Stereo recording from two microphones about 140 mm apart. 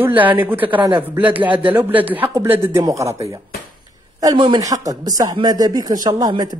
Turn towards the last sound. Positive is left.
turn(degrees=-25)  # may be behind; listen again after turning